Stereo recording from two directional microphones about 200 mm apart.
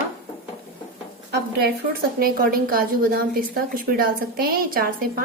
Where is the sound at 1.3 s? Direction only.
55° right (ahead or behind).